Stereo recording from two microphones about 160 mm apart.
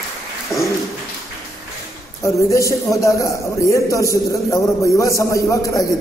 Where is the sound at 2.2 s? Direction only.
20° left (ahead or behind).